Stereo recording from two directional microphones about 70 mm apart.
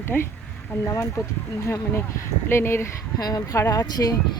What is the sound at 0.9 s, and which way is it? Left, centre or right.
Speech, left.